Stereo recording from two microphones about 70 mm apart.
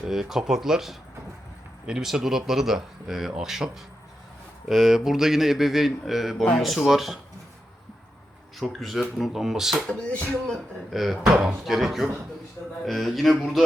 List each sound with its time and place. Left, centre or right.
0.0 s speech: centre
4.7 s speech: centre
8.5 s speech: centre
9.8 s speech: centre
10.9 s speech: centre
11.3 s speech: centre
11.6 s speech: centre